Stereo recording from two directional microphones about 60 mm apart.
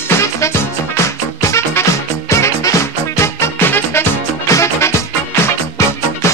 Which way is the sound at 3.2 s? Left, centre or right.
Left.